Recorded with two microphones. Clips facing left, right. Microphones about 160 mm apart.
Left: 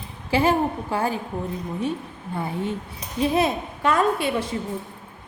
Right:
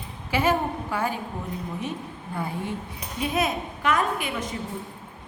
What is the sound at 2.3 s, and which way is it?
A woman's voice, 25° left (ahead or behind).